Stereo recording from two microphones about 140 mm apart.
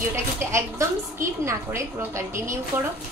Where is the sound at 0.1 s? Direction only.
20° right (ahead or behind).